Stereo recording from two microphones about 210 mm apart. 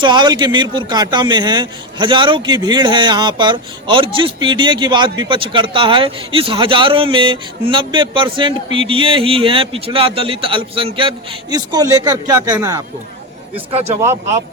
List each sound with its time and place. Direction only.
0.0 s speech: 20° right (ahead or behind)
13.7 s speech: 30° right (ahead or behind)
14.0 s speech: 10° right (ahead or behind)